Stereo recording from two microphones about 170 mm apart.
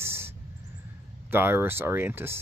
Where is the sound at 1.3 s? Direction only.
10° right (ahead or behind).